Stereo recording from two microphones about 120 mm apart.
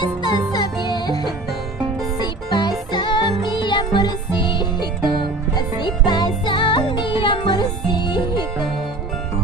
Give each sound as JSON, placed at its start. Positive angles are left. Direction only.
{"t": 0.0, "sound": "music", "side_deg": 35}